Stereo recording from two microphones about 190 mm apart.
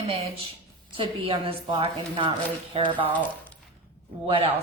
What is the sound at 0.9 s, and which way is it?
A woman's voice, 25° right (ahead or behind).